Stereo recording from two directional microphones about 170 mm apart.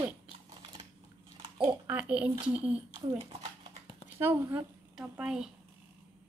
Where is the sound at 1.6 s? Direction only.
10° right (ahead or behind).